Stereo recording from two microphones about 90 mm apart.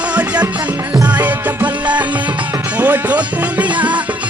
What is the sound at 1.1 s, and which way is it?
Music, 15° right (ahead or behind).